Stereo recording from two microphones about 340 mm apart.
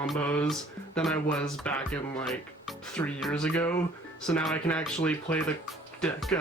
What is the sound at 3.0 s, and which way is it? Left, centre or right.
Speech, centre.